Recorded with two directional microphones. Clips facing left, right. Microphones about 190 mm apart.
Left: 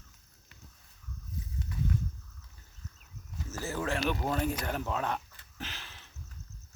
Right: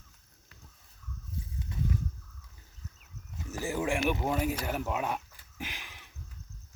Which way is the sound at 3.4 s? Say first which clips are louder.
Right 3 dB; 15° right (ahead or behind).